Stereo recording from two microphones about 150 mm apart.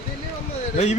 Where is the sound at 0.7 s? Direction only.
50° left (ahead or behind).